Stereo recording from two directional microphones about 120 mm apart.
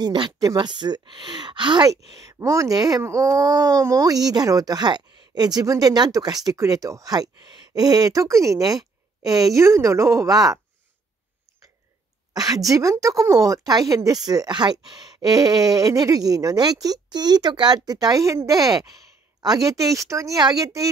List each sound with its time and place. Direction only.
0.0 s speech: 40° right (ahead or behind)
2.1 s speech: 25° right (ahead or behind)
12.4 s speech: 30° right (ahead or behind)